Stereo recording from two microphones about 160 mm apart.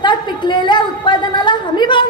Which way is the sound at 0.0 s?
30° left (ahead or behind).